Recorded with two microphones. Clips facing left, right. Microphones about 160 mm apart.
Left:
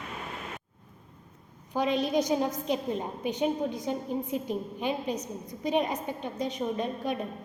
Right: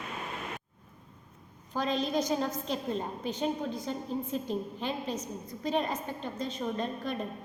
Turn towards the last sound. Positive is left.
turn(degrees=10)  # may be behind; listen again after turning